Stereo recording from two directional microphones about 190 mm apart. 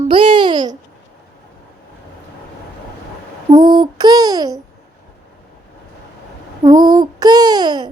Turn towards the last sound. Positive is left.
turn(degrees=-20)  # may be behind; listen again after turning